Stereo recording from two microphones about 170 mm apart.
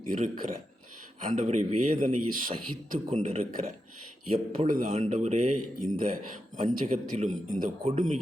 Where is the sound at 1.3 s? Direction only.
40° right (ahead or behind).